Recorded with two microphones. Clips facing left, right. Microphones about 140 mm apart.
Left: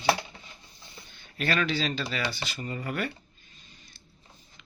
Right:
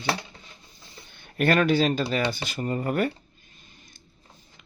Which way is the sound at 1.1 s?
55° right (ahead or behind).